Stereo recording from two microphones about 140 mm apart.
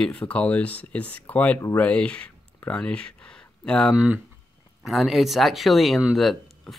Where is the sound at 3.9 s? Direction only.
10° right (ahead or behind).